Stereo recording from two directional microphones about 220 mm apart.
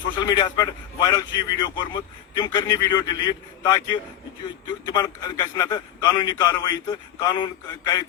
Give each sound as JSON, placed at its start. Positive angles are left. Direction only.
{"t": 0.2, "sound": "a man's voice", "side_deg": 20}